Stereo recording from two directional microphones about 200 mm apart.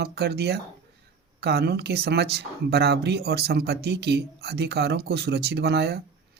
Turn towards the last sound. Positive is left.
turn(degrees=-55)  # may be behind; listen again after turning